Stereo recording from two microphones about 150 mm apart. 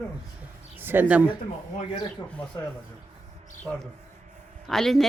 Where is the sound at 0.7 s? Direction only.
15° right (ahead or behind).